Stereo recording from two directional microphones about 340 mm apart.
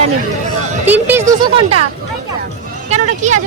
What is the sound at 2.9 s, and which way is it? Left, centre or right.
Speech, right.